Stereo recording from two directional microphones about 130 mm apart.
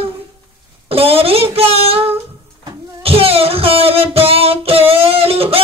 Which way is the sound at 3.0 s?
45° right (ahead or behind).